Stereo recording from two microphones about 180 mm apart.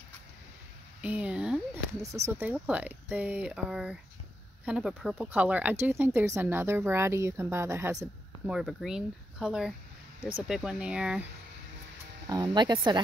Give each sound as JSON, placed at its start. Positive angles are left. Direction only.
{"t": 1.0, "sound": "a sound", "side_deg": -5}
{"t": 2.2, "sound": "speech", "side_deg": -10}
{"t": 8.5, "sound": "speech", "side_deg": 0}
{"t": 12.3, "sound": "speech", "side_deg": -20}